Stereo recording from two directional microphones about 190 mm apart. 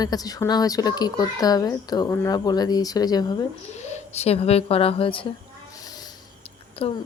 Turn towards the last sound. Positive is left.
turn(degrees=30)  # may be behind; listen again after turning